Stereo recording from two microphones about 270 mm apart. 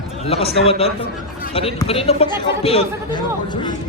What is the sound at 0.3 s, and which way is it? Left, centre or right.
Speech, left.